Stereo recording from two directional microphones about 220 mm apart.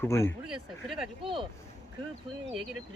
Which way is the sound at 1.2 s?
25° right (ahead or behind).